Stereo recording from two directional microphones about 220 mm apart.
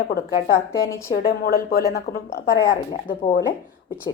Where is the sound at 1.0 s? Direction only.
40° left (ahead or behind).